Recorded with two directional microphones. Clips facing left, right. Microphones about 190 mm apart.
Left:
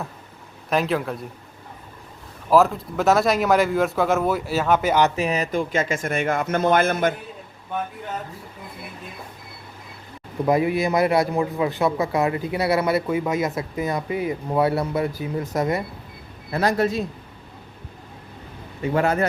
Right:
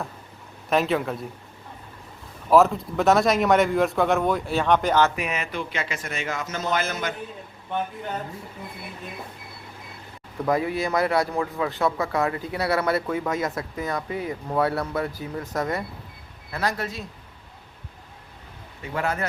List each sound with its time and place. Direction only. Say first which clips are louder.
0.7 s speech: even; centre (ahead or behind)
2.5 s speech: even; centre (ahead or behind)
5.1 s speech: left 6 dB; 35° left (ahead or behind); by 7.1 s 55° left (ahead or behind)
7.7 s speech: even; centre (ahead or behind)
10.4 s a man's voice: left 4 dB; 15° left (ahead or behind)
18.8 s a man's voice: left 7 dB; 30° left (ahead or behind)